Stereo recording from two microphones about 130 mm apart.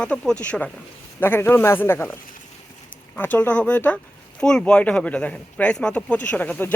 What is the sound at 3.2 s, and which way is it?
Speech, 15° left (ahead or behind).